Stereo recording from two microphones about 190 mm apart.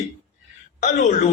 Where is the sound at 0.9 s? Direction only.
40° left (ahead or behind).